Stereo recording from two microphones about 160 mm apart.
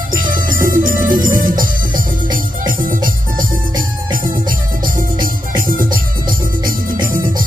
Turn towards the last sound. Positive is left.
turn(degrees=-60)  # may be behind; listen again after turning